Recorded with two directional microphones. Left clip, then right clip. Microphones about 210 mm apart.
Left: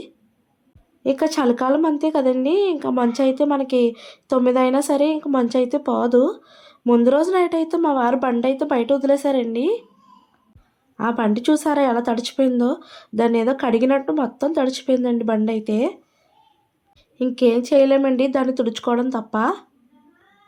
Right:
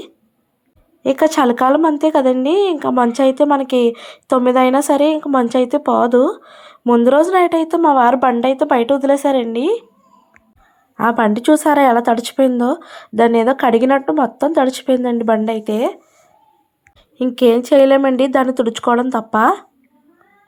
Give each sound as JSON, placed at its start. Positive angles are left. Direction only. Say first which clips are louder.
{"t": 1.0, "sound": "a woman's voice", "louder": "right 6 dB", "side_deg": -20}
{"t": 10.9, "sound": "speech", "louder": "right 7 dB", "side_deg": -20}
{"t": 17.2, "sound": "speech", "louder": "right 5 dB", "side_deg": -20}